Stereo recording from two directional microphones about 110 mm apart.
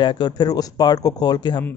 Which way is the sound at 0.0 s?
40° left (ahead or behind).